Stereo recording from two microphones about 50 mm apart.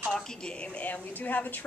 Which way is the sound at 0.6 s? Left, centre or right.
Left.